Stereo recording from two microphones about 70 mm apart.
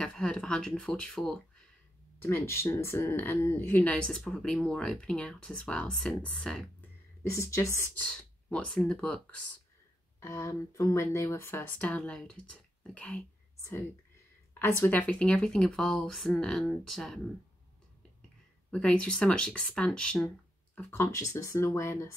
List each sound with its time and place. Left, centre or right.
0.0 s speech: centre
2.2 s speech: left
3.8 s speech: centre
7.2 s speech: left
8.0 s speech: centre
10.2 s speech: left
11.8 s speech: centre
13.6 s speech: left
14.8 s speech: left; by 17.2 s centre
18.7 s speech: centre
20.9 s speech: left